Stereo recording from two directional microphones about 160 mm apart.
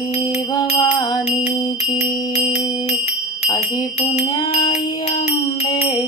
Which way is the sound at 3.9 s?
40° left (ahead or behind).